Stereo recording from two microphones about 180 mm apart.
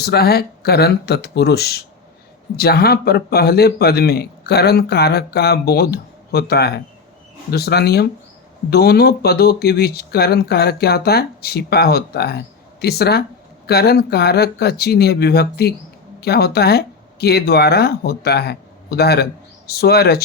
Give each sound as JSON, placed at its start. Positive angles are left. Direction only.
{"t": 0.0, "sound": "a man's voice", "side_deg": 60}